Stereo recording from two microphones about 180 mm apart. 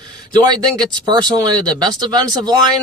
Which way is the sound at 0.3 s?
20° right (ahead or behind).